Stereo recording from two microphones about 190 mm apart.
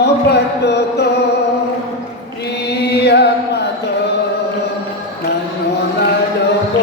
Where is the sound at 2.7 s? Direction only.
60° left (ahead or behind).